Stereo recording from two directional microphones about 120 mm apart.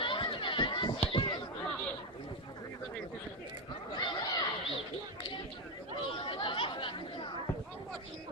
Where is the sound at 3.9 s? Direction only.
40° left (ahead or behind).